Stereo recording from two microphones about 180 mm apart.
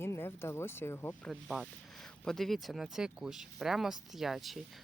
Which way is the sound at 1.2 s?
Centre (ahead or behind).